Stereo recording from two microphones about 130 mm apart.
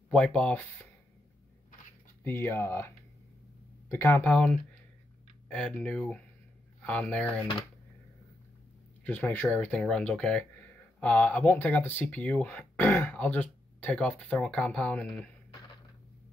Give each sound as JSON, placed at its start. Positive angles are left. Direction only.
{"t": 0.1, "sound": "speech", "side_deg": 5}
{"t": 2.2, "sound": "speech", "side_deg": 15}
{"t": 3.9, "sound": "speech", "side_deg": 15}
{"t": 9.0, "sound": "speech", "side_deg": 15}